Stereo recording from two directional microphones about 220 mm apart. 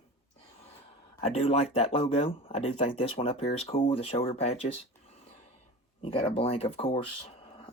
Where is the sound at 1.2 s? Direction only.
25° left (ahead or behind).